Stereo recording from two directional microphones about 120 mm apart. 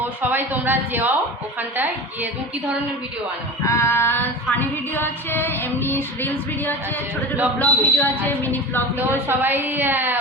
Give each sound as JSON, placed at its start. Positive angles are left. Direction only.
{"t": 0.2, "sound": "a woman's voice", "side_deg": -15}
{"t": 3.6, "sound": "a sound", "side_deg": 25}
{"t": 4.9, "sound": "female singing", "side_deg": 15}
{"t": 9.0, "sound": "a woman's voice", "side_deg": -20}